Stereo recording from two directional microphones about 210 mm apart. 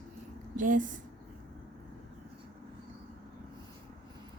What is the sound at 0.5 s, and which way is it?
Speech, 40° right (ahead or behind).